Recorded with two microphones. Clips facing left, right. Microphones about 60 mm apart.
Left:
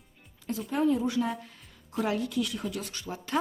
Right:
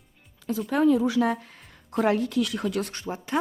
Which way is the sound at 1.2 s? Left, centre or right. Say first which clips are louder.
Right 6 dB; right.